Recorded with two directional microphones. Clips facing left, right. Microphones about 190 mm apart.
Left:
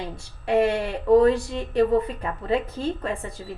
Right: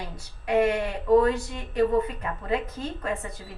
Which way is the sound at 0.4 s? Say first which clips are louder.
Left 2 dB; 30° left (ahead or behind).